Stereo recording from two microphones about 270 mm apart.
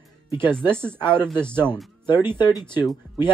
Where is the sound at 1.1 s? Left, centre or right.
Centre.